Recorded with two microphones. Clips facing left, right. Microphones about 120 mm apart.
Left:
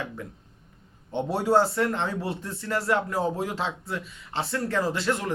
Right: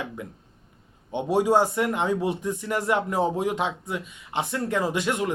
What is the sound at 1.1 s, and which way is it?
Speech, 15° right (ahead or behind).